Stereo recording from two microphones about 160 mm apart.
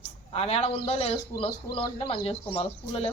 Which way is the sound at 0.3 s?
40° left (ahead or behind).